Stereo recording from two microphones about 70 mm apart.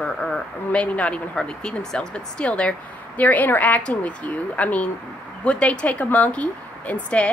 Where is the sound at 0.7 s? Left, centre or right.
Centre.